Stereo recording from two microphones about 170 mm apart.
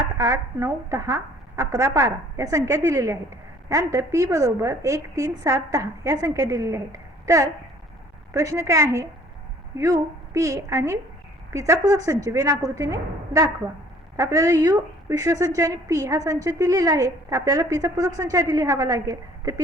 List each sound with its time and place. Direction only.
0.2 s a woman's voice: 15° right (ahead or behind)